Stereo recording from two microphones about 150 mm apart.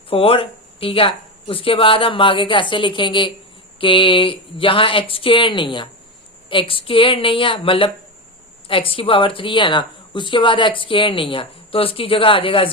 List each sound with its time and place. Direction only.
0.1 s speech: 35° left (ahead or behind)